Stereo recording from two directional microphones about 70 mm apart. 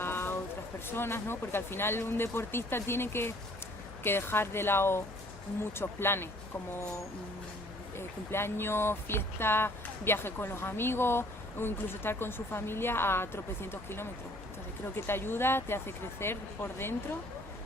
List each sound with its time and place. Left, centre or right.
0.0 s a sound: left
0.9 s speech: left
7.9 s speech: left